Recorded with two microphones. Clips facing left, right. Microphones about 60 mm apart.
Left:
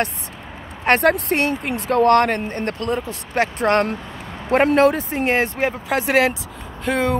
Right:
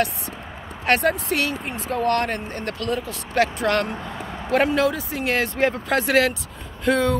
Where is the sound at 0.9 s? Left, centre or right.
Left.